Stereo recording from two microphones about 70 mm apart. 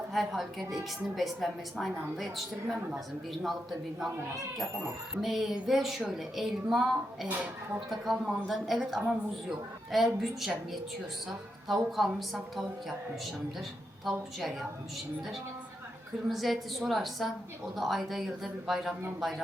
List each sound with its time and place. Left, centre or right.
0.1 s speech: centre
4.5 s speech: centre
14.0 s speech: centre
16.3 s speech: centre